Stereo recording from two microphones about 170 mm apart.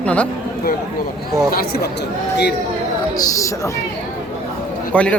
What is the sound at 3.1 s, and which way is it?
Speech, 20° left (ahead or behind).